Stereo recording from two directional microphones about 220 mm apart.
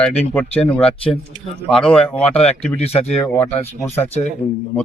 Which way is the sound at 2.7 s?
25° left (ahead or behind).